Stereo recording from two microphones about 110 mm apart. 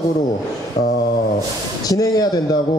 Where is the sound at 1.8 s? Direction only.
35° left (ahead or behind).